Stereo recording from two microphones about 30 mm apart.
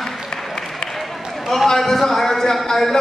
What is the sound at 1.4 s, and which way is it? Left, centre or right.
A man's voice, centre.